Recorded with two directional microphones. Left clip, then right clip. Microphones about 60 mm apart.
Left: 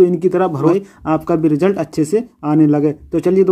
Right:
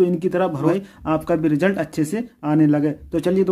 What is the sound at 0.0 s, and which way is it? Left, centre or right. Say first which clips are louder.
Speech: left 6 dB; left.